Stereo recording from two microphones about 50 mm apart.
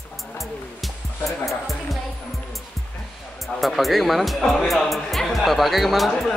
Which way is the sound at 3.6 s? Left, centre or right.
Centre.